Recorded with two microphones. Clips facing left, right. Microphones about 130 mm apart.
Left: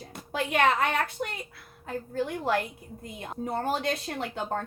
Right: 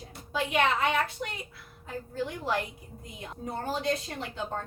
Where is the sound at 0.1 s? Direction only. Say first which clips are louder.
Left 1 dB; 65° left (ahead or behind).